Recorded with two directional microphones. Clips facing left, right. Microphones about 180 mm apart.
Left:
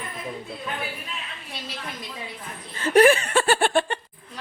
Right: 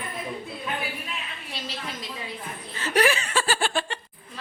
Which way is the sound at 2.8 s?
50° left (ahead or behind).